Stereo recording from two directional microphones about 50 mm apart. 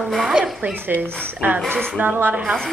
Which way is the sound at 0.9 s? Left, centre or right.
Right.